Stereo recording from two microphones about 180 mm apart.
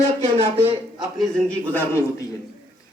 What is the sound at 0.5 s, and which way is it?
Speech, 10° right (ahead or behind).